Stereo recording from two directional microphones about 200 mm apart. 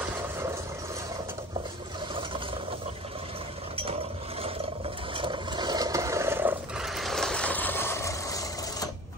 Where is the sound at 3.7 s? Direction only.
30° right (ahead or behind).